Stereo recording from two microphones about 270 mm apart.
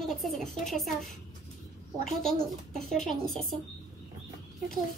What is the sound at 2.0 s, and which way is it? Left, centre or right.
Speech, centre.